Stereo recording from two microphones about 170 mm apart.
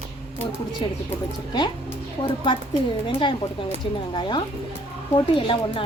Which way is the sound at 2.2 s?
30° left (ahead or behind).